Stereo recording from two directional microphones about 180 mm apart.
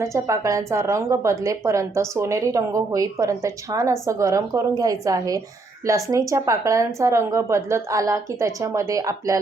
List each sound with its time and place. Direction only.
0.0 s a woman's voice: 15° right (ahead or behind)